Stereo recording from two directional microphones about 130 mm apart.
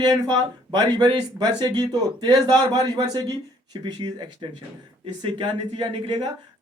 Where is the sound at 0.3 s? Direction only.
30° right (ahead or behind).